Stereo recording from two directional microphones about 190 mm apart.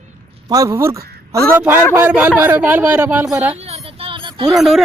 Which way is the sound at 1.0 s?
55° right (ahead or behind).